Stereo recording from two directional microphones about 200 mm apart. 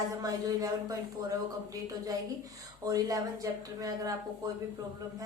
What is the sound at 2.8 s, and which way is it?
Speech, 15° right (ahead or behind).